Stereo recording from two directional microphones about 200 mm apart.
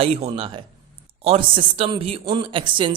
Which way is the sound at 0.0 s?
30° right (ahead or behind).